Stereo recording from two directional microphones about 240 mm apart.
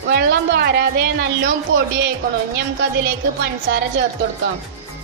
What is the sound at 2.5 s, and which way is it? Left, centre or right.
Speech, right.